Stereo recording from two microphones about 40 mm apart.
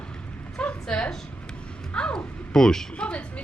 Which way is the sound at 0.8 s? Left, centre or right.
Centre.